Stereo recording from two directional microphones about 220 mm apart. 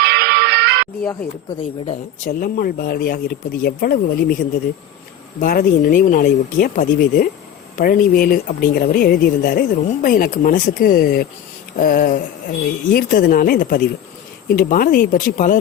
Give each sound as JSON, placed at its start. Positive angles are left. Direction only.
{"t": 0.0, "sound": "music", "side_deg": -50}
{"t": 1.9, "sound": "speech", "side_deg": 35}